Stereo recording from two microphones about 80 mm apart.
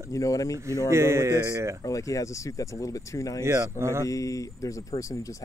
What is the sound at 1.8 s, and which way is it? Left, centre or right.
Speech, left.